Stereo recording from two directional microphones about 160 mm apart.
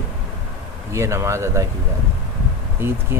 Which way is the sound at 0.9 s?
20° right (ahead or behind).